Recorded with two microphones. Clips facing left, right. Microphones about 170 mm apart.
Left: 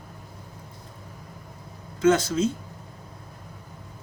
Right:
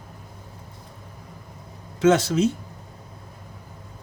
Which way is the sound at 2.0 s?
75° right (ahead or behind).